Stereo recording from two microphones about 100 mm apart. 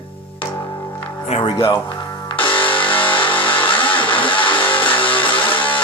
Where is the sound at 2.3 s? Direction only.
60° left (ahead or behind).